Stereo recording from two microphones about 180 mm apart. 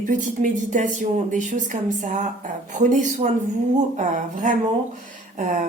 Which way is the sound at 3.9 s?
45° right (ahead or behind).